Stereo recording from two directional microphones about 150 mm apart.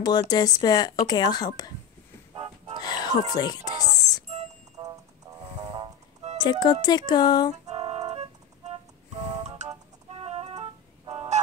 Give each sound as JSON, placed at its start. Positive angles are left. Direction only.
{"t": 0.0, "sound": "speech", "side_deg": 25}
{"t": 2.3, "sound": "music", "side_deg": -40}
{"t": 2.8, "sound": "speech", "side_deg": 25}
{"t": 4.3, "sound": "music", "side_deg": -50}
{"t": 5.6, "sound": "music", "side_deg": -25}
{"t": 6.4, "sound": "speech", "side_deg": 30}
{"t": 7.7, "sound": "organ", "side_deg": -40}
{"t": 9.4, "sound": "music", "side_deg": -50}